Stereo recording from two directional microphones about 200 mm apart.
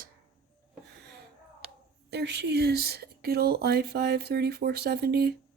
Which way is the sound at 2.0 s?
55° right (ahead or behind).